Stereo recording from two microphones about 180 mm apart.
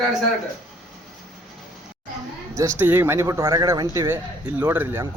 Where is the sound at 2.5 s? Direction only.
15° right (ahead or behind).